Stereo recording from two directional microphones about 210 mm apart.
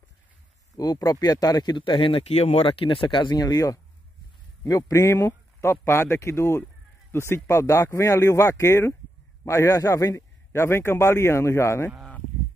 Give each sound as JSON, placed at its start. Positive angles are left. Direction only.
{"t": 0.7, "sound": "a man's voice", "side_deg": 15}